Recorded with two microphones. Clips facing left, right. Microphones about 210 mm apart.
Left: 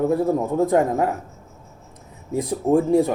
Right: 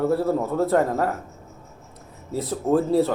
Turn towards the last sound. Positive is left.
turn(degrees=15)  # may be behind; listen again after turning